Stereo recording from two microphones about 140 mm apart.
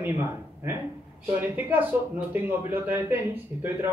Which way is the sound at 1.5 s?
10° right (ahead or behind).